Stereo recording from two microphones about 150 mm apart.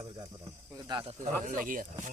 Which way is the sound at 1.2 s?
60° right (ahead or behind).